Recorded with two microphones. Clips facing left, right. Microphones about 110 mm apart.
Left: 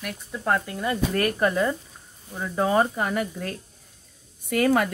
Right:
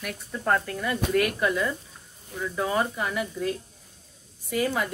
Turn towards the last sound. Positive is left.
turn(degrees=60)  # may be behind; listen again after turning